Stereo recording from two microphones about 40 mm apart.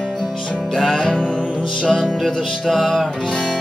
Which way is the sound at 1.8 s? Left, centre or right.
Centre.